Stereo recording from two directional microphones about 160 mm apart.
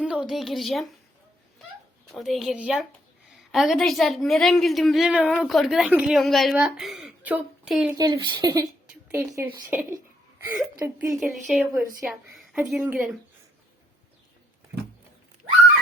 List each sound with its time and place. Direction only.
0.0 s a woman's voice: 5° right (ahead or behind)
2.0 s a woman's voice: centre (ahead or behind)
7.9 s a woman's voice: 25° right (ahead or behind)
11.2 s a woman's voice: centre (ahead or behind)
12.0 s a woman's voice: 10° right (ahead or behind)